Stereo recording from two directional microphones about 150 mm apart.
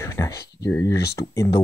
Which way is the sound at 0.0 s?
20° left (ahead or behind).